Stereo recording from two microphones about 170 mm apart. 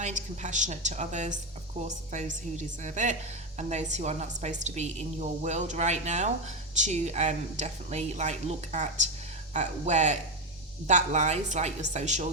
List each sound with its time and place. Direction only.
0.0 s a woman's voice: 45° right (ahead or behind)